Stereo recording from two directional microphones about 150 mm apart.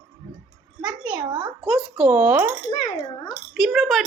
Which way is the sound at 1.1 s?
35° right (ahead or behind).